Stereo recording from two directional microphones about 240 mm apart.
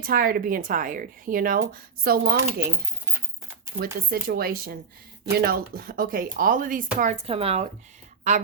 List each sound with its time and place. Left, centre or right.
0.0 s a woman's voice: right
4.1 s a woman's voice: right